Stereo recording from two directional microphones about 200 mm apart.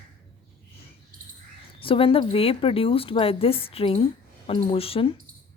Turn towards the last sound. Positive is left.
turn(degrees=30)  # may be behind; listen again after turning